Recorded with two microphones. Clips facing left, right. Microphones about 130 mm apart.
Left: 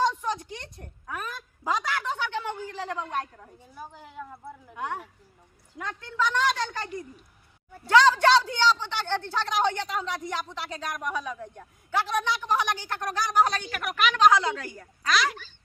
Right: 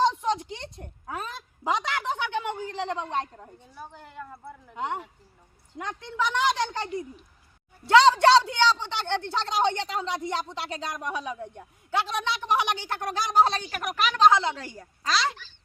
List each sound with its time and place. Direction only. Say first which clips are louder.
0.0 s a sound: right 2 dB; 25° right (ahead or behind)
3.6 s speech: left 3 dB; 5° left (ahead or behind)
4.7 s a woman's voice: right 2 dB; 20° right (ahead or behind)
7.9 s speech: right 2 dB; 20° right (ahead or behind)